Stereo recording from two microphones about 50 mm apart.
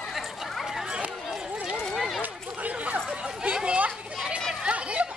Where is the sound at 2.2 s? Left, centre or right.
Right.